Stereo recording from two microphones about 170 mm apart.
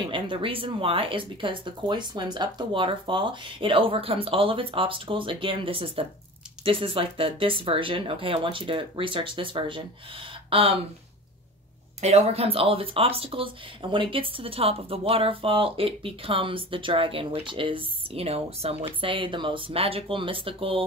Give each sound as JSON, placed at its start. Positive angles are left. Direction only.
{"t": 0.1, "sound": "speech", "side_deg": -30}
{"t": 12.0, "sound": "speech", "side_deg": -40}